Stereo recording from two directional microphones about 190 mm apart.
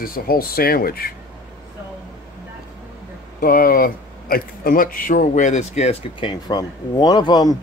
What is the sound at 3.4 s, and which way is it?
A man's voice, 50° left (ahead or behind).